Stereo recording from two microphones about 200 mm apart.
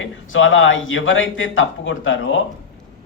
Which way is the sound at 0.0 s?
75° left (ahead or behind).